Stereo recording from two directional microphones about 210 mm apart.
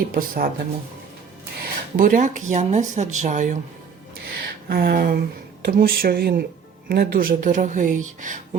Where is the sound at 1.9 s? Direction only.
40° right (ahead or behind).